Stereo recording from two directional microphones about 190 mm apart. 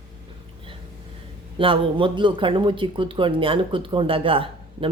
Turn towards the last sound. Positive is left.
turn(degrees=-30)  # may be behind; listen again after turning